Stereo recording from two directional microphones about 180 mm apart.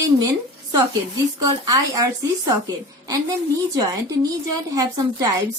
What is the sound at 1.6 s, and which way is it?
Speech, 20° right (ahead or behind).